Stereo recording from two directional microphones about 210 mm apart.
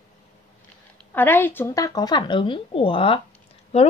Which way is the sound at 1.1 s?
10° left (ahead or behind).